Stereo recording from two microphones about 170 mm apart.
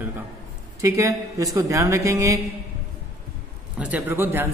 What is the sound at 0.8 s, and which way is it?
A man's voice, 15° right (ahead or behind).